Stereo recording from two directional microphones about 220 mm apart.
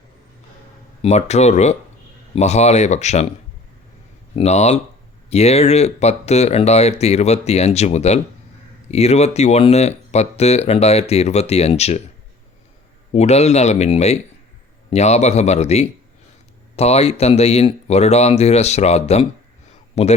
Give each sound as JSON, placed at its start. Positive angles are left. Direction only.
{"t": 1.0, "sound": "speech", "side_deg": 30}
{"t": 4.4, "sound": "speech", "side_deg": 30}
{"t": 13.1, "sound": "speech", "side_deg": 30}